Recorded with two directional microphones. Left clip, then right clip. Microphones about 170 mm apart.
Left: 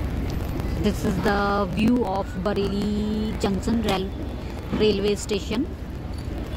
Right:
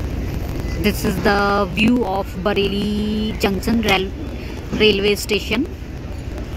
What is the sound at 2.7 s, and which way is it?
Speech, 40° right (ahead or behind).